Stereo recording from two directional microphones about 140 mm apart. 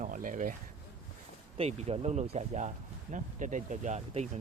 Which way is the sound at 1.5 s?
50° right (ahead or behind).